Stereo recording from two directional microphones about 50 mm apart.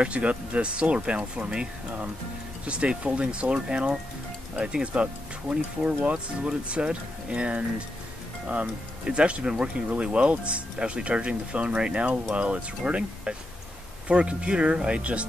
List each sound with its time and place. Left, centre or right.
0.0 s speech: right